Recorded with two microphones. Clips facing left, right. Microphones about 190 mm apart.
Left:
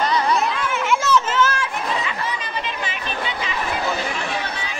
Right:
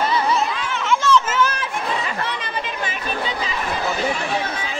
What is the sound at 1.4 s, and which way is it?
Children playing, 15° right (ahead or behind).